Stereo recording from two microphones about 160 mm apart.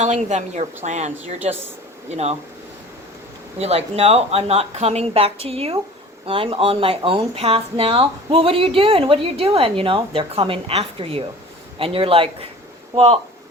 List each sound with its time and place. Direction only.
0.0 s a woman's voice: 45° right (ahead or behind)
3.6 s speech: 40° right (ahead or behind)